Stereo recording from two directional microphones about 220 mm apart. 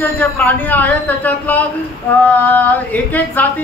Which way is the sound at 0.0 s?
10° left (ahead or behind).